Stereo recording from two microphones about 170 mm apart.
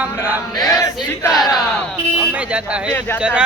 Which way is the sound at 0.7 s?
20° left (ahead or behind).